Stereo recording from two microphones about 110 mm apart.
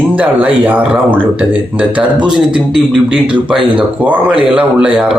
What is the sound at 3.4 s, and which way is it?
Speech, 10° right (ahead or behind).